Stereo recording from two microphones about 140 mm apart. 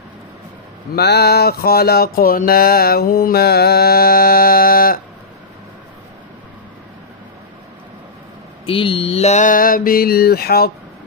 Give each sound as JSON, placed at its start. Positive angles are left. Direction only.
{"t": 1.4, "sound": "mantra", "side_deg": 90}
{"t": 8.6, "sound": "mantra", "side_deg": 40}